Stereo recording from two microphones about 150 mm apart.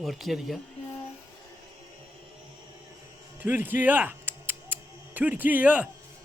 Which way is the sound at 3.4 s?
10° right (ahead or behind).